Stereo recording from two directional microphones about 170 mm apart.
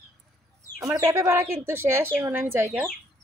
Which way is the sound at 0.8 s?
15° right (ahead or behind).